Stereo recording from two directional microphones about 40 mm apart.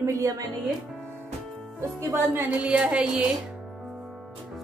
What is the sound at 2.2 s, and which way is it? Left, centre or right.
Music, right.